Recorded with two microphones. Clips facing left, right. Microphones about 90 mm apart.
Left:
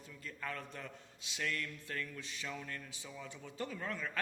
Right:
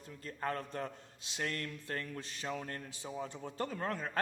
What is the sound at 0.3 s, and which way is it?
A man's voice, 40° right (ahead or behind).